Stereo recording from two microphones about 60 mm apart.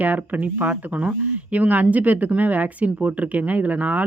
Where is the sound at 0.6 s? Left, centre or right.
Right.